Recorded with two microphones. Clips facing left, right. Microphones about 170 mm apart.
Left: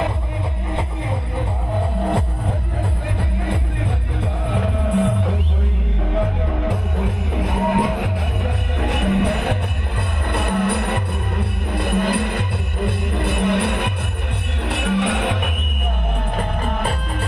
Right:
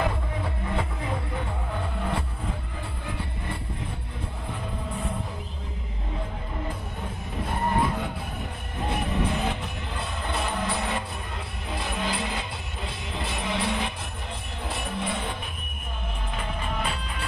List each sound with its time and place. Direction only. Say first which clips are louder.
4.5 s music: left 13 dB; 80° left
8.8 s music: left 7 dB; 70° left (ahead or behind)
16.3 s music: left 5 dB; 50° left (ahead or behind)